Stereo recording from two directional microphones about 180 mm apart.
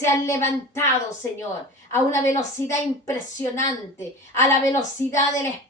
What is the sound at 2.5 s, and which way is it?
A woman's voice, 15° left (ahead or behind).